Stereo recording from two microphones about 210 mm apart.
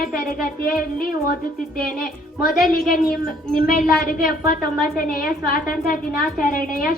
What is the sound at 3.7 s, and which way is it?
A woman's voice, 45° left (ahead or behind).